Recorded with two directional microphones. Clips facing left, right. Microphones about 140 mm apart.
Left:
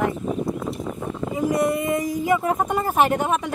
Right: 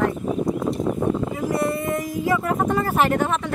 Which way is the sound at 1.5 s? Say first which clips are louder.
Left 2 dB; 20° left (ahead or behind).